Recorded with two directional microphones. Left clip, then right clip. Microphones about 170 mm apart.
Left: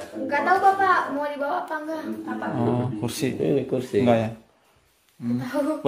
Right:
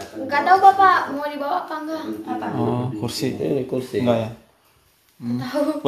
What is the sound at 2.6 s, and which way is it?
Speech, 10° left (ahead or behind).